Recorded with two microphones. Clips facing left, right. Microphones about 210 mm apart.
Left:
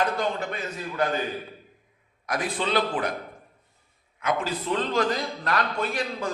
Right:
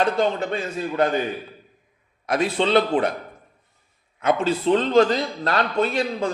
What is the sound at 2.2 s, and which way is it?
Speech, 25° right (ahead or behind).